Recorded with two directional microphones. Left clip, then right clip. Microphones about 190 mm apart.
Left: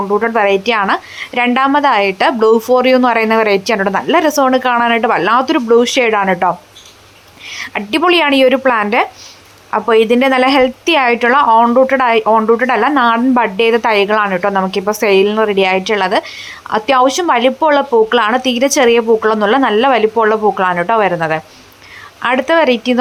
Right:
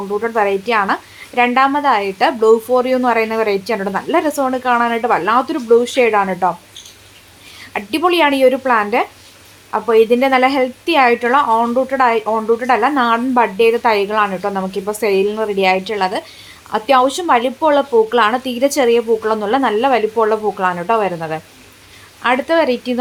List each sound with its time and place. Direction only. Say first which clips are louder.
0.1 s a woman's voice: left 3 dB; 35° left (ahead or behind)
7.6 s a woman's voice: left 3 dB; 20° left (ahead or behind)